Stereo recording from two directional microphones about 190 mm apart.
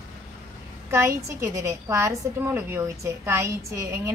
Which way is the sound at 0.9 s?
15° right (ahead or behind).